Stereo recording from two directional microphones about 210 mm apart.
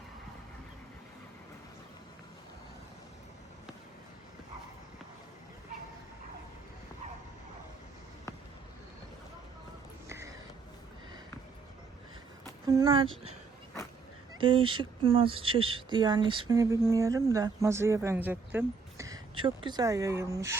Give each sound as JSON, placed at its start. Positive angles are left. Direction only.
{"t": 10.1, "sound": "a sound", "side_deg": -15}
{"t": 12.6, "sound": "speech", "side_deg": -20}
{"t": 14.3, "sound": "speech", "side_deg": -25}